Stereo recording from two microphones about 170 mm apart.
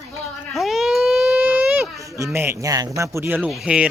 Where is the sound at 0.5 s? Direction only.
Centre (ahead or behind).